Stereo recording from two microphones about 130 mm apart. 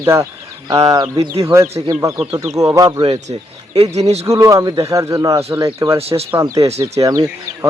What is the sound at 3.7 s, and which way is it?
Speech, 55° right (ahead or behind).